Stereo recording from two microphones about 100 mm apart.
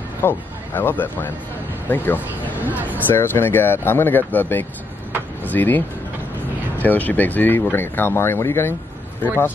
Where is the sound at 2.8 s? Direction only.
20° left (ahead or behind).